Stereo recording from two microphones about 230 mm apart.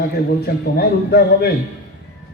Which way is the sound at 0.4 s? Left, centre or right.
Left.